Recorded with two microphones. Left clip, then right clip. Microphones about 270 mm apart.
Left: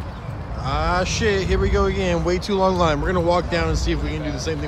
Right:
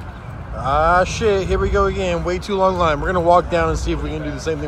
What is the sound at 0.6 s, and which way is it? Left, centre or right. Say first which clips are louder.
A man's voice: right 7 dB; centre.